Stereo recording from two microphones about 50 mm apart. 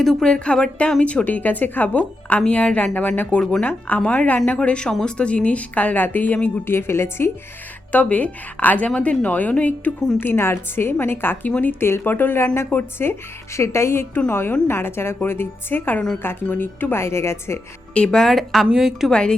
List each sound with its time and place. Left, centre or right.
0.0 s speech: centre
0.3 s speech: centre
4.0 s speech: left
6.7 s a woman's voice: left
7.9 s speech: left
10.2 s a woman's voice: left
17.9 s speech: centre
18.7 s a woman's voice: centre